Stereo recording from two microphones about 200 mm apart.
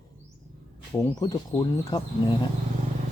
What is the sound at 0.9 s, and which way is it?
Speech, 10° left (ahead or behind).